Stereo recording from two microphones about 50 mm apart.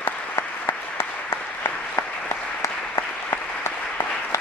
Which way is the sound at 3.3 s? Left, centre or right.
Left.